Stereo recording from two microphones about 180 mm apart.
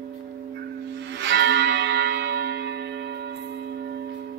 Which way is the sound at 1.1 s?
90° right.